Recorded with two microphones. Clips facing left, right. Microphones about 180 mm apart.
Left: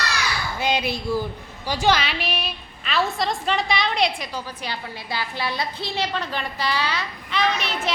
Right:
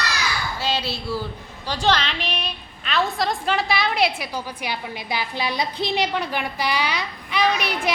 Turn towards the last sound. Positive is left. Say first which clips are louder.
# right 2 dB
turn(degrees=-10)  # may be behind; listen again after turning